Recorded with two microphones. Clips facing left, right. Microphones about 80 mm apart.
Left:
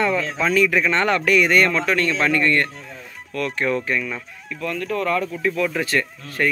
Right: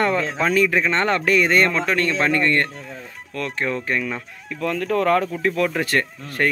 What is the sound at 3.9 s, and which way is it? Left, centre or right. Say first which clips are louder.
Speech: right 1 dB; right.